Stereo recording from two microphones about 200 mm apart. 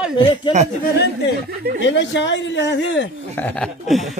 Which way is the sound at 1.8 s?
65° left (ahead or behind).